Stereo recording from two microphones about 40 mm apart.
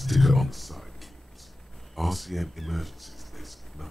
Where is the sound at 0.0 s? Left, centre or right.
Centre.